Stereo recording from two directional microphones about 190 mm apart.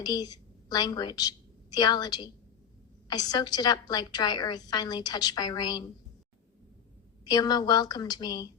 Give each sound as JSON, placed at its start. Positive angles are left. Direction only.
{"t": 0.0, "sound": "a woman's voice", "side_deg": 20}
{"t": 7.3, "sound": "a woman's voice", "side_deg": 20}